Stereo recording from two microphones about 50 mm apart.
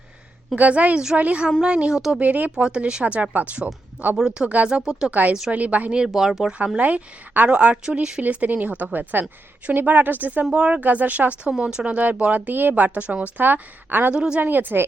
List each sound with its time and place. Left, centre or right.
0.5 s speech: right
2.1 s speech: right
2.6 s speech: centre
3.0 s speech: right
4.2 s speech: centre
5.5 s speech: right
6.1 s speech: centre
6.7 s speech: right; by 8.2 s centre
8.2 s speech: right
10.5 s speech: right
10.8 s speech: right
13.3 s speech: right
14.1 s speech: right
14.4 s speech: right